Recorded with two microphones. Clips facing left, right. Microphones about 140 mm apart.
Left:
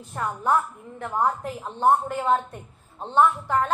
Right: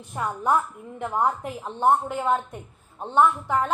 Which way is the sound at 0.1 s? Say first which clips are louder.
Even; 10° right (ahead or behind).